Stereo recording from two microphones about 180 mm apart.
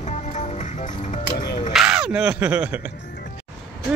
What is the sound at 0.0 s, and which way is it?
Music, 40° left (ahead or behind).